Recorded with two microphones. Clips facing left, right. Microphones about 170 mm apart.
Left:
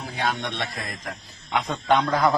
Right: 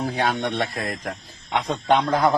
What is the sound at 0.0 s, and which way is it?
Speech, 45° right (ahead or behind).